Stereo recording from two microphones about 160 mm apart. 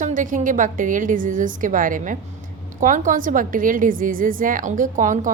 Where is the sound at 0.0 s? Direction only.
55° right (ahead or behind).